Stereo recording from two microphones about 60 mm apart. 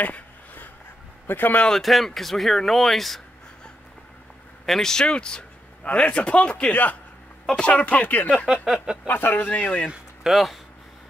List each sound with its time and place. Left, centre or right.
0.0 s a sound: left
1.2 s speech: left
1.7 s speech: centre
4.6 s a man's voice: centre; by 8.3 s left
8.6 s speech: centre
9.0 s speech: left
9.5 s a man's voice: left
9.8 s speech: centre